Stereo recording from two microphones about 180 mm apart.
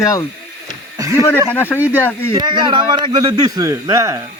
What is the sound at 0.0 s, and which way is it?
Speech, 15° left (ahead or behind).